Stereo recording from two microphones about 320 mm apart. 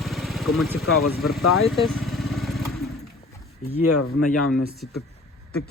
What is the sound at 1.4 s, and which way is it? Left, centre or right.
Speech, left.